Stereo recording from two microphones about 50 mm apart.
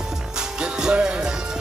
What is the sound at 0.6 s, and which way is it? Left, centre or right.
Music, centre.